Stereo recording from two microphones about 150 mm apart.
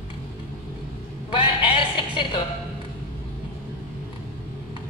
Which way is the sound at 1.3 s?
35° left (ahead or behind).